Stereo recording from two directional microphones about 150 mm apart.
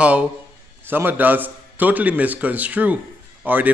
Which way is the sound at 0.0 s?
10° right (ahead or behind).